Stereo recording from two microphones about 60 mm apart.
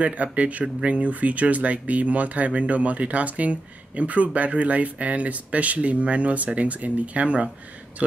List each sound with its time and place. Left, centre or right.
0.0 s speech: right